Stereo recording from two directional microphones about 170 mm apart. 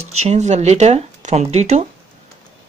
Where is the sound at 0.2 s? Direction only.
40° right (ahead or behind).